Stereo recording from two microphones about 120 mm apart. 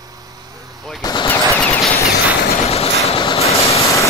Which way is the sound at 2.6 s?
60° left (ahead or behind).